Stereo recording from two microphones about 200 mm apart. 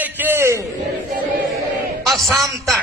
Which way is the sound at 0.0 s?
10° right (ahead or behind).